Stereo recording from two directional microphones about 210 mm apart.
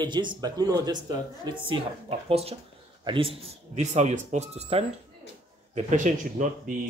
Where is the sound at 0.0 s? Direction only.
20° right (ahead or behind).